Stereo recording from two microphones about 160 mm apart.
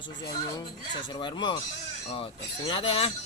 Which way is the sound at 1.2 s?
30° left (ahead or behind).